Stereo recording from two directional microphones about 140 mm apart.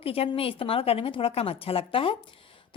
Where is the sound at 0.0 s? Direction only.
40° left (ahead or behind).